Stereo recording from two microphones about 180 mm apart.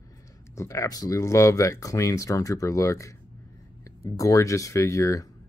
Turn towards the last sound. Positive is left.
turn(degrees=15)  # may be behind; listen again after turning